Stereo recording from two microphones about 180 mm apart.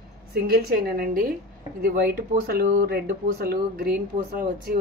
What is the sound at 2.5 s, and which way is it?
Speech, 55° right (ahead or behind).